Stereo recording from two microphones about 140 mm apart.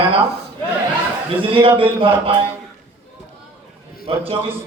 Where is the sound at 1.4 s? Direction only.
40° right (ahead or behind).